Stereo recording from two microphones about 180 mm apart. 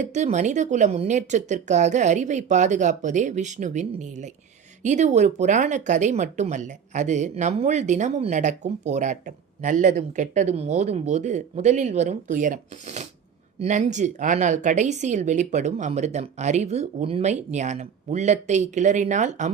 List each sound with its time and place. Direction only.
0.0 s speech: 40° right (ahead or behind)